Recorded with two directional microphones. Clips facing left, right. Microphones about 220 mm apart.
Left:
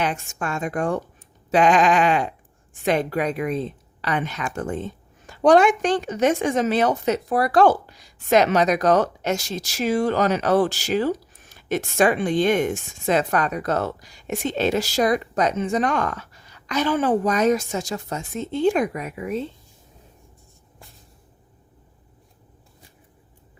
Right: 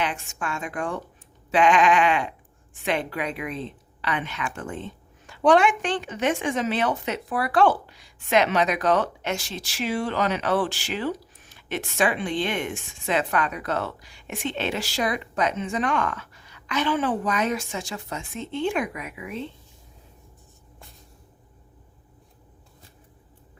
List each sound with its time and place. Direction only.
0.0 s a woman's voice: 40° left (ahead or behind)